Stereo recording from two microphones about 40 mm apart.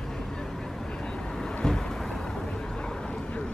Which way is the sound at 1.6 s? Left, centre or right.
Centre.